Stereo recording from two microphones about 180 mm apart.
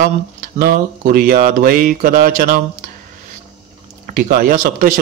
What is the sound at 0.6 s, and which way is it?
A man's voice, 55° right (ahead or behind).